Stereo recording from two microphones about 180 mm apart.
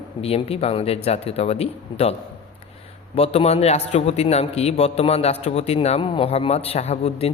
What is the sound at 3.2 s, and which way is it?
A man's voice, 35° left (ahead or behind).